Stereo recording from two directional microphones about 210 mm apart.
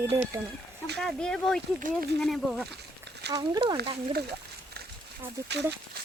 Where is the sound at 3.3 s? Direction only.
20° right (ahead or behind).